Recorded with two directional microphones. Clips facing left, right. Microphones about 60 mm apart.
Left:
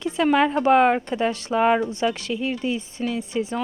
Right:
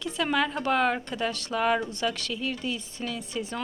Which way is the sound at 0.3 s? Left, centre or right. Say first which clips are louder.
Left 8 dB; left.